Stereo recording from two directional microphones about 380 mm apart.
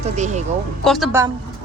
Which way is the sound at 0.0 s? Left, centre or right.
Centre.